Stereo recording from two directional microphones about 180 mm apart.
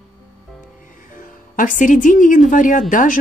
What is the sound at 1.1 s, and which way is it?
Speech, 50° left (ahead or behind).